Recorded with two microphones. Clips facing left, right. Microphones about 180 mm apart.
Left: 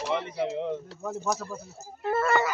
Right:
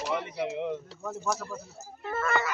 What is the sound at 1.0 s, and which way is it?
Speech, 10° left (ahead or behind).